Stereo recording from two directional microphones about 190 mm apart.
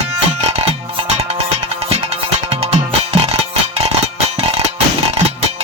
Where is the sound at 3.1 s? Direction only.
35° right (ahead or behind).